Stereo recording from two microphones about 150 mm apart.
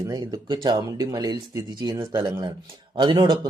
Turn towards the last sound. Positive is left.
turn(degrees=-30)  # may be behind; listen again after turning